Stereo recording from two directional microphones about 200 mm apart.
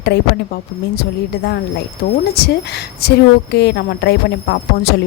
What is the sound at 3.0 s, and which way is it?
A woman's voice, 55° left (ahead or behind).